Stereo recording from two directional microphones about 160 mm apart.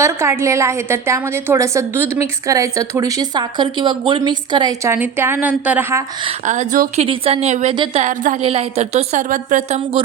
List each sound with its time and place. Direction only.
0.0 s a woman's voice: 15° right (ahead or behind)
6.4 s a woman's voice: 50° right (ahead or behind)
7.0 s a woman's voice: 40° right (ahead or behind)
8.4 s a woman's voice: 40° right (ahead or behind)